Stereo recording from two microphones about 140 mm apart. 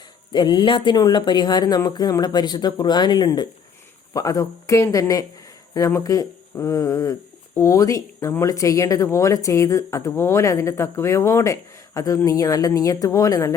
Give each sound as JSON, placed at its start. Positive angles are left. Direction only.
{"t": 0.3, "sound": "speech", "side_deg": 35}